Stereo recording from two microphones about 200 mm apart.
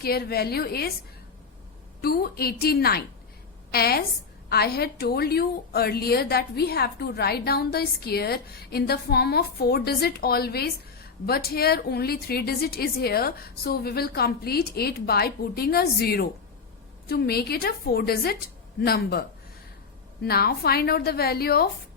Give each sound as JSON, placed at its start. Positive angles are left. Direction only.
{"t": 0.0, "sound": "a woman's voice", "side_deg": 50}
{"t": 2.0, "sound": "a woman's voice", "side_deg": 50}
{"t": 20.2, "sound": "a woman's voice", "side_deg": 50}